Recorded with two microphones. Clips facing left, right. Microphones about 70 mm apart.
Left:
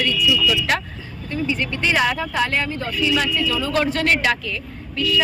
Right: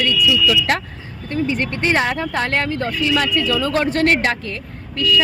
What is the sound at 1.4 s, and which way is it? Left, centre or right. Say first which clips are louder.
Speech: right 2 dB; right.